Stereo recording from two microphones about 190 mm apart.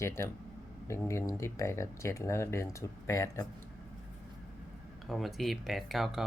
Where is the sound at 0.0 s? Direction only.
15° left (ahead or behind).